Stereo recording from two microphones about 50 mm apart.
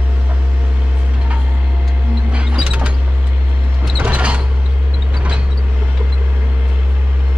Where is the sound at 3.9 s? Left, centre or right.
Right.